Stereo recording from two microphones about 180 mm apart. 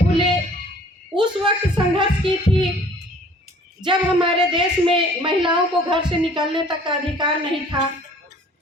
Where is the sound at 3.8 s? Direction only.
25° right (ahead or behind).